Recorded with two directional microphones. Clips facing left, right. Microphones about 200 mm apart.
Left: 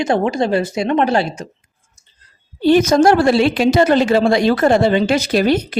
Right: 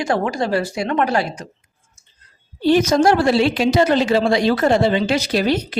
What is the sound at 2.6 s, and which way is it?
A woman's voice, 55° left (ahead or behind).